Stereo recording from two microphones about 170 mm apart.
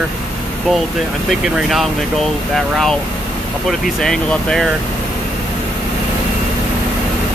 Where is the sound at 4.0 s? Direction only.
5° left (ahead or behind).